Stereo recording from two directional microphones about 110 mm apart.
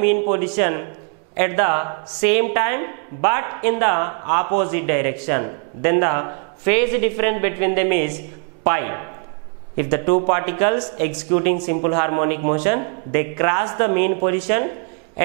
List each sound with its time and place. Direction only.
0.0 s a woman's voice: 10° right (ahead or behind)